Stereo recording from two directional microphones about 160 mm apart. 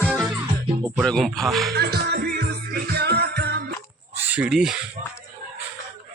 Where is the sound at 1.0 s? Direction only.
Centre (ahead or behind).